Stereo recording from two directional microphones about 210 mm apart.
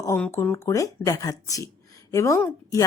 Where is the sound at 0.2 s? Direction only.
10° left (ahead or behind).